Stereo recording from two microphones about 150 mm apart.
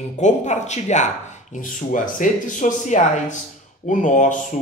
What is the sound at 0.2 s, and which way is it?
Speech, 50° left (ahead or behind).